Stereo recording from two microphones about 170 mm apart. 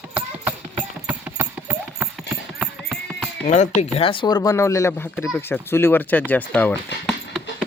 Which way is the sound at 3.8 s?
35° left (ahead or behind).